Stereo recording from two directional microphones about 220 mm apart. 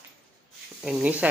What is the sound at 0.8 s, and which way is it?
Speech, 5° right (ahead or behind).